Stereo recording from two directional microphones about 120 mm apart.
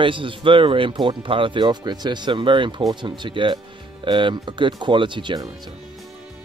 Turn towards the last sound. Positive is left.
turn(degrees=-40)  # may be behind; listen again after turning